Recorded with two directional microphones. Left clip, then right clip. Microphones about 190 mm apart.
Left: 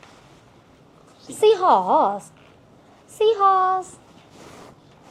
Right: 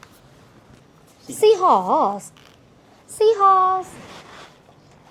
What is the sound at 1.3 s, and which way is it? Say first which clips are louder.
Speech: right 1 dB; 35° right (ahead or behind).